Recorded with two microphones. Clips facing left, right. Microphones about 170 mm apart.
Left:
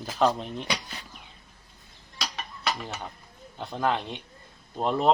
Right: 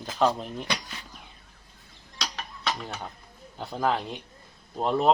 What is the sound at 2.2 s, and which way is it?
Mechanisms, 5° left (ahead or behind).